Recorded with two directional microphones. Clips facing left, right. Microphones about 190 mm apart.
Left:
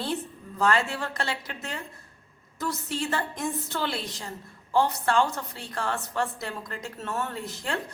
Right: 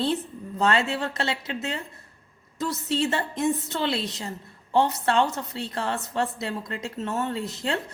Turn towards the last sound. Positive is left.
turn(degrees=-20)  # may be behind; listen again after turning